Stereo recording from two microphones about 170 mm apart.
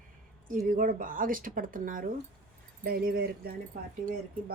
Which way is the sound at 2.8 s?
65° right (ahead or behind).